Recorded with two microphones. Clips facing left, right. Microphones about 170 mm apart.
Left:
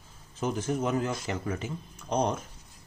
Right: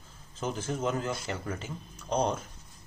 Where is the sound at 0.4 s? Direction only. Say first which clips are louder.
Left 3 dB; 15° left (ahead or behind).